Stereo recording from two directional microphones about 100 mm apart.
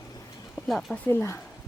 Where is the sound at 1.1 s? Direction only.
25° left (ahead or behind).